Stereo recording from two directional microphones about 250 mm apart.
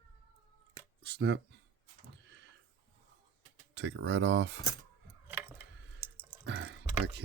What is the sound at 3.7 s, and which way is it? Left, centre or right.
Speech, right.